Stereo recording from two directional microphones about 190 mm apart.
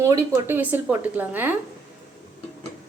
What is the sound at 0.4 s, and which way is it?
A woman's voice, 10° right (ahead or behind).